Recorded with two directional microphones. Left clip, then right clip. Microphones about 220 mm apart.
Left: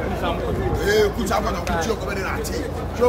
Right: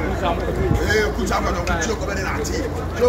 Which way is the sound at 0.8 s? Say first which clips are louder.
Left 3 dB; 50° left (ahead or behind).